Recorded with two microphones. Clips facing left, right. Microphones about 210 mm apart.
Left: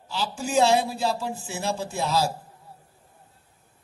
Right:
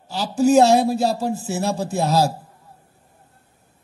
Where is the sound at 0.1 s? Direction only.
40° right (ahead or behind).